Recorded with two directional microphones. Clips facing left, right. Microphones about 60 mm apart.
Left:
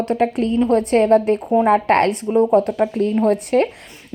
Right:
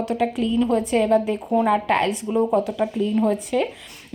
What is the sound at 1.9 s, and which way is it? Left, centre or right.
A woman's voice, left.